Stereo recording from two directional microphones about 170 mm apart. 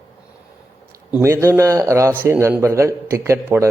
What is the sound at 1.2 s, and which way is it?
A man's voice, 15° right (ahead or behind).